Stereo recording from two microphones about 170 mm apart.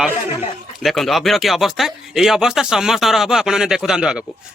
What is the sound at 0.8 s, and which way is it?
Speech, centre (ahead or behind).